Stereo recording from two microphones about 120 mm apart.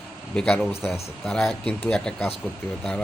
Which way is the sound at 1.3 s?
5° left (ahead or behind).